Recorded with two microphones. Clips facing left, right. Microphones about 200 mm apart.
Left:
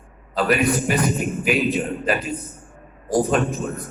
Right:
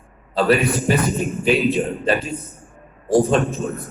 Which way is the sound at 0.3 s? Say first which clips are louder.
Right 2 dB; 30° right (ahead or behind).